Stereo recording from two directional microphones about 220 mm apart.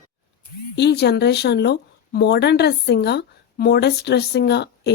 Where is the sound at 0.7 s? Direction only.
50° left (ahead or behind).